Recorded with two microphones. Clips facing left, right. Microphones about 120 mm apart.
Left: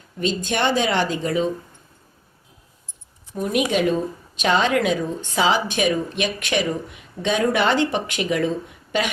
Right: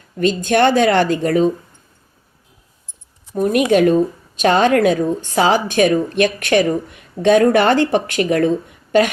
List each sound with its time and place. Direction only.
0.2 s a woman's voice: 55° right (ahead or behind)
3.3 s a woman's voice: 50° right (ahead or behind)